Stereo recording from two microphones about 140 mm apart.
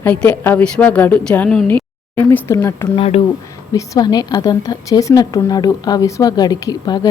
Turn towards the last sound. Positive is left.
turn(degrees=30)  # may be behind; listen again after turning